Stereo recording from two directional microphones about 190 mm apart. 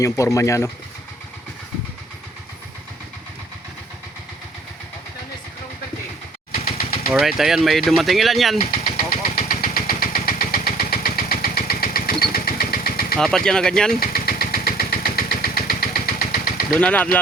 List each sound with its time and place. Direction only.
0.0 s speech: 15° left (ahead or behind)
7.1 s speech: centre (ahead or behind)
8.8 s vehicle: 50° left (ahead or behind)
13.1 s speech: 5° left (ahead or behind)
14.0 s engine: 50° left (ahead or behind)
16.6 s speech: 5° left (ahead or behind)